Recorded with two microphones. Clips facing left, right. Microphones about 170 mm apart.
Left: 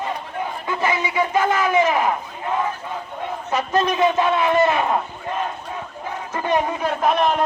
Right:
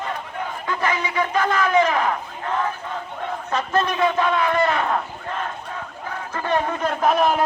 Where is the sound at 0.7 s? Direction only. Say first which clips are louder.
Left 1 dB; 15° left (ahead or behind).